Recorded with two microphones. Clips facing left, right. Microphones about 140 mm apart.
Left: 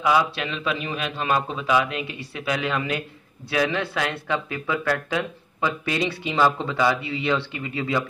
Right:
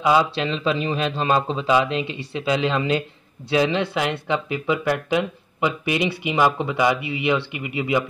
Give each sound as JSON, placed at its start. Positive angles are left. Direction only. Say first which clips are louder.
{"t": 0.0, "sound": "a man's voice", "louder": "right 3 dB", "side_deg": -25}